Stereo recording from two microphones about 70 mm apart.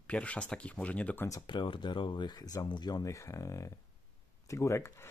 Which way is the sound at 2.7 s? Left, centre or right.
Left.